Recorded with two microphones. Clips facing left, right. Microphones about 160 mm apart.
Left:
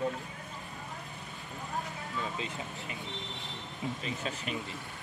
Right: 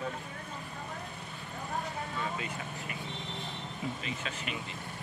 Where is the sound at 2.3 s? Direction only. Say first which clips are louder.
Even; 20° left (ahead or behind).